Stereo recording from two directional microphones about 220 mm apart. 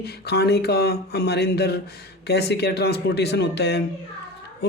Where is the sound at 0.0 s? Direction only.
50° left (ahead or behind).